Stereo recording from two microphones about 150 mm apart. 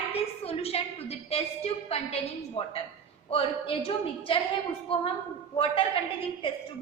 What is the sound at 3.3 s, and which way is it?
A woman's voice, 40° left (ahead or behind).